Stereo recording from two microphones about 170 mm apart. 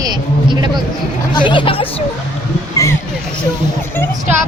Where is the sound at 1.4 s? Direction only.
30° left (ahead or behind).